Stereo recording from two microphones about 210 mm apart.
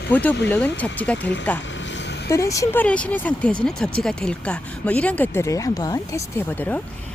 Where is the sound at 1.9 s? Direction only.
55° left (ahead or behind).